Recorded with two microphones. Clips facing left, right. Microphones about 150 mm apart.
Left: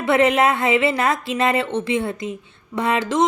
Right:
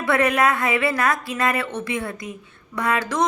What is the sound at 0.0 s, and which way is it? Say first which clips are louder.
A woman's voice: left 3 dB; 25° left (ahead or behind).